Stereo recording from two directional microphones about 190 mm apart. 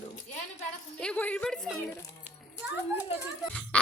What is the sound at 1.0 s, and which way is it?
A woman's voice, 5° left (ahead or behind).